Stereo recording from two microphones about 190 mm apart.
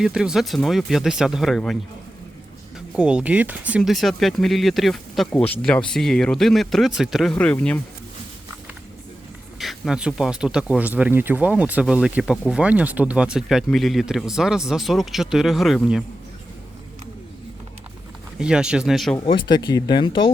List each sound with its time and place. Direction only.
0.0 s speech: 5° right (ahead or behind)
2.9 s speech: 5° right (ahead or behind)
9.6 s speech: centre (ahead or behind)
18.3 s speech: 5° right (ahead or behind)
19.2 s speech: 25° left (ahead or behind)